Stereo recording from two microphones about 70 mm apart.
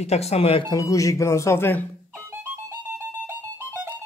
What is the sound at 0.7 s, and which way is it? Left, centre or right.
Speech, left.